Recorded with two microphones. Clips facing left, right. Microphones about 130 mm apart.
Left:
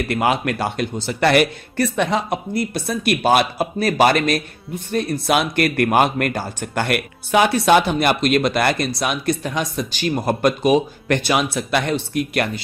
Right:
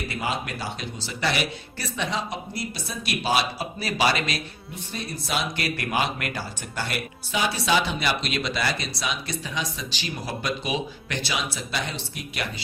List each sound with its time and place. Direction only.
0.1 s a man's voice: 65° left (ahead or behind)